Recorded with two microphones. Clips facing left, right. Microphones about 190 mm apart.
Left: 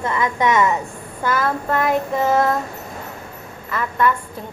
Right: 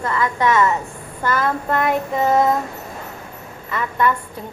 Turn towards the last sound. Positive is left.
turn(degrees=0)  # may be behind; listen again after turning